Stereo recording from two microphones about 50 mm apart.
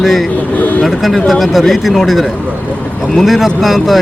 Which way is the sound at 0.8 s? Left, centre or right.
Centre.